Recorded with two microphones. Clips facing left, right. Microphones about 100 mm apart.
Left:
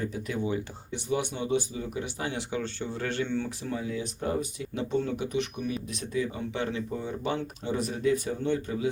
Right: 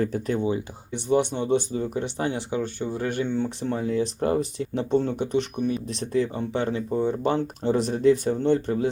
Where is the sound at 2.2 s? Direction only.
25° right (ahead or behind).